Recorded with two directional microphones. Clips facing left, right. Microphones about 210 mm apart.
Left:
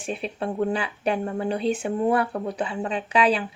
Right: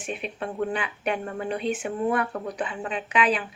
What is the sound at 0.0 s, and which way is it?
A woman's voice, 35° left (ahead or behind).